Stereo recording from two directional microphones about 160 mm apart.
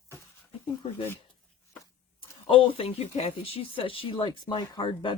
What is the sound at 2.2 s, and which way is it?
Speech, 35° left (ahead or behind).